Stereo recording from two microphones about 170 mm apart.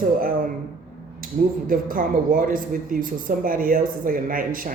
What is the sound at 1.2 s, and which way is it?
A man's voice, 55° right (ahead or behind).